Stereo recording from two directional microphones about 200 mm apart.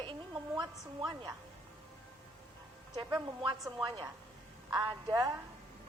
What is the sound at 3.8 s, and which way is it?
A woman's voice, 20° right (ahead or behind).